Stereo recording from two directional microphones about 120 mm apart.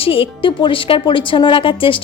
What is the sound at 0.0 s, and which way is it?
Speech, 50° left (ahead or behind).